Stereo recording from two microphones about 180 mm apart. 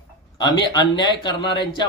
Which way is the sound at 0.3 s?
25° left (ahead or behind).